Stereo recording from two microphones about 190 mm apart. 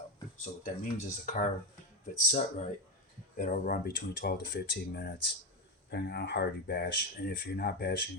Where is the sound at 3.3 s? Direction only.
45° left (ahead or behind).